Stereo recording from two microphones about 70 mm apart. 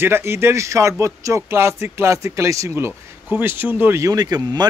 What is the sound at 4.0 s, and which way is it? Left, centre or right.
Speech, right.